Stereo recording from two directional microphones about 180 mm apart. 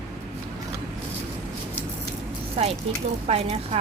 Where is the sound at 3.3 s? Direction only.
35° right (ahead or behind).